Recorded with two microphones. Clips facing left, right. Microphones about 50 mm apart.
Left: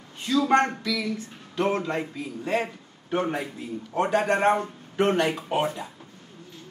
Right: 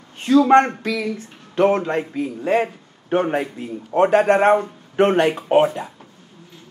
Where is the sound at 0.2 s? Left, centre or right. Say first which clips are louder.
Right 8 dB; right.